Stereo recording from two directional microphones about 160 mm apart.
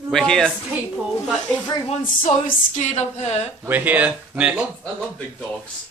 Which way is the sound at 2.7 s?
45° left (ahead or behind).